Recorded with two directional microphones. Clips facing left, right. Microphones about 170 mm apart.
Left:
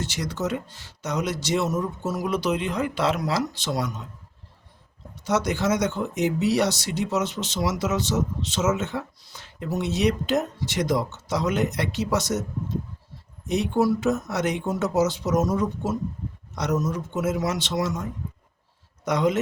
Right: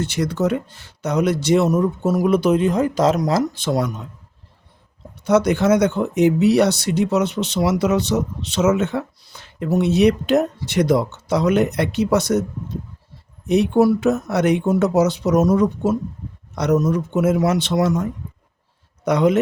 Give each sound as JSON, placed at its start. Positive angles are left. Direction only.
{"t": 0.0, "sound": "speech", "side_deg": -60}
{"t": 5.2, "sound": "speech", "side_deg": -60}
{"t": 13.5, "sound": "speech", "side_deg": -60}
{"t": 19.0, "sound": "speech", "side_deg": -60}